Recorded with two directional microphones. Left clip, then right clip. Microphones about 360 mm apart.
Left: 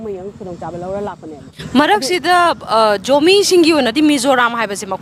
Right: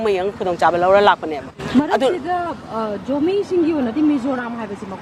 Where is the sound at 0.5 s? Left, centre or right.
Centre.